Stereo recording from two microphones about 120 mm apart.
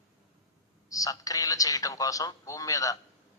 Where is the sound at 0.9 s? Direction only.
30° left (ahead or behind).